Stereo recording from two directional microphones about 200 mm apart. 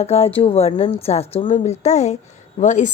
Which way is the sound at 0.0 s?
30° left (ahead or behind).